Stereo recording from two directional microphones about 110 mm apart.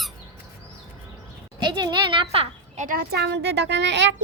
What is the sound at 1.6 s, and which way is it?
A child's voice, 40° right (ahead or behind).